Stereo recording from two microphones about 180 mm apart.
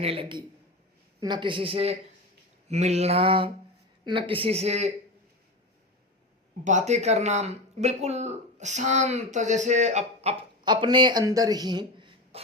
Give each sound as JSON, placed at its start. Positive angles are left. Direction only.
{"t": 0.0, "sound": "speech", "side_deg": -30}
{"t": 6.7, "sound": "speech", "side_deg": -40}
{"t": 10.6, "sound": "speech", "side_deg": -25}